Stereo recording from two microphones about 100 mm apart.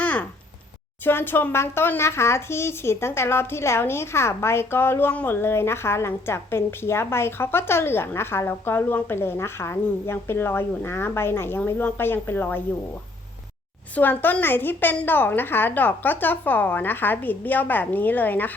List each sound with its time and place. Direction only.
0.0 s a sound: 15° left (ahead or behind)
1.0 s speech: 20° left (ahead or behind)
13.9 s speech: 20° left (ahead or behind)